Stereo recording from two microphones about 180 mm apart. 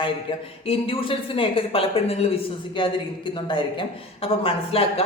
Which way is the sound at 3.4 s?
30° left (ahead or behind).